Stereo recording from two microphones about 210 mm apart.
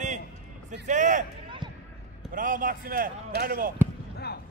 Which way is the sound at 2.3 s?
40° right (ahead or behind).